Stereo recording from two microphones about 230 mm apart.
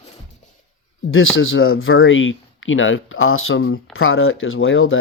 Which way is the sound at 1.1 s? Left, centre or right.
Left.